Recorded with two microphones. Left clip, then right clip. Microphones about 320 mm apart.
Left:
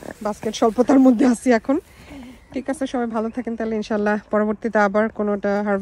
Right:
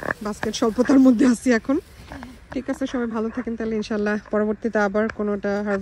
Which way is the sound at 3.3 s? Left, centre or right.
Left.